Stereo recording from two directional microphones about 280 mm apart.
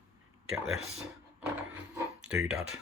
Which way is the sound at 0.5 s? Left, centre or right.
Centre.